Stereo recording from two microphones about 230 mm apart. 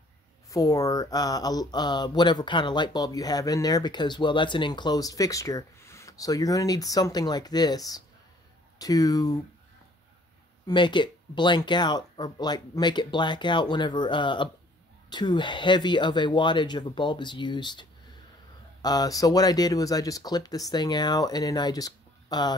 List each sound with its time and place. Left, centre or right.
0.5 s speech: centre
10.7 s speech: centre